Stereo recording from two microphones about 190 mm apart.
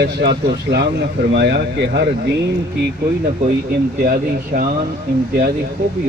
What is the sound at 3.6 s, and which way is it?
Speech, 50° right (ahead or behind).